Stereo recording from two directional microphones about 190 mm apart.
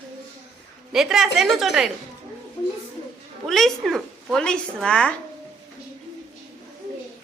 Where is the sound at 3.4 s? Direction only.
Centre (ahead or behind).